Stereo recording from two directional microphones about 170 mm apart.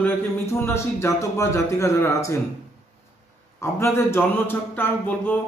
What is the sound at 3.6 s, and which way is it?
A man's voice, 15° left (ahead or behind).